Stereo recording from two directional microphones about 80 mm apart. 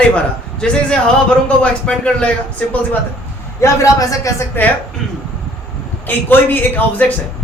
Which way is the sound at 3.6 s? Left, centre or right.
Left.